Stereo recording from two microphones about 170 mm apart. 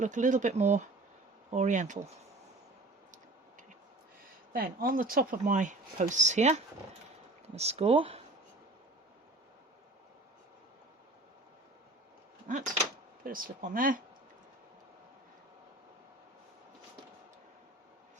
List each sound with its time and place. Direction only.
0.0 s speech: 45° right (ahead or behind)
4.5 s speech: 55° right (ahead or behind); by 8.2 s 35° right (ahead or behind)
12.5 s speech: 45° right (ahead or behind)